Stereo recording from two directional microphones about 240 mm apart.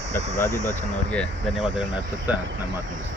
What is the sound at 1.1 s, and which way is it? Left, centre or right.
Speech, centre.